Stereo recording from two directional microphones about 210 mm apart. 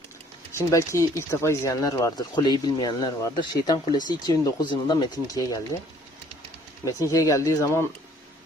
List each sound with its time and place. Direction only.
0.5 s speech: 15° left (ahead or behind)
6.8 s speech: 15° left (ahead or behind)